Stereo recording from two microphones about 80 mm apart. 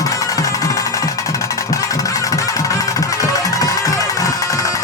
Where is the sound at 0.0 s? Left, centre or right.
Left.